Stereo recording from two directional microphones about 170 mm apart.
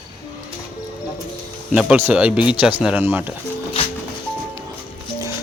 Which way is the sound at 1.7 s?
5° right (ahead or behind).